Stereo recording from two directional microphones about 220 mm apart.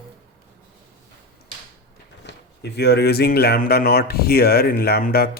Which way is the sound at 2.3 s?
50° left (ahead or behind).